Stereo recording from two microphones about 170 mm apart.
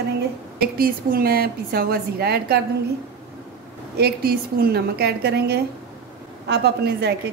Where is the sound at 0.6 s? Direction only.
60° right (ahead or behind).